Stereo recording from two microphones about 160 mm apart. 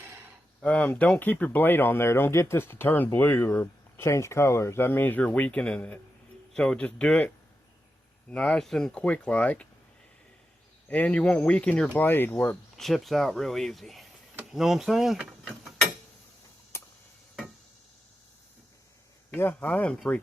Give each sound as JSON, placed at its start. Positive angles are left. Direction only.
{"t": 0.0, "sound": "a sound", "side_deg": -15}
{"t": 0.6, "sound": "speech", "side_deg": 10}
{"t": 10.8, "sound": "speech", "side_deg": 10}
{"t": 12.7, "sound": "speech", "side_deg": 0}
{"t": 16.7, "sound": "a sound", "side_deg": 15}
{"t": 19.3, "sound": "speech", "side_deg": 10}